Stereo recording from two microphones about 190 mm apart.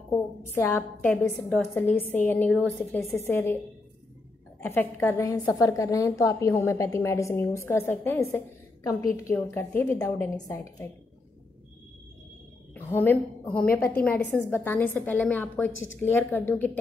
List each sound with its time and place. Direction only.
0.6 s a woman's voice: 15° left (ahead or behind)
3.2 s a woman's voice: 15° left (ahead or behind)
4.6 s a woman's voice: 10° left (ahead or behind)
12.7 s a woman's voice: 10° left (ahead or behind)